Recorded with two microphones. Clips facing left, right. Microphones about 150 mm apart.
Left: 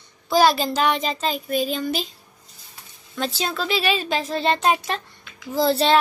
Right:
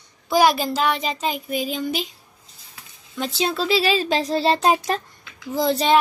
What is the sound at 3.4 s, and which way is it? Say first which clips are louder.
Speech: right 4 dB; 30° right (ahead or behind).